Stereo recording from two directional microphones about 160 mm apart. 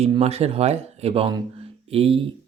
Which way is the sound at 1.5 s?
35° right (ahead or behind).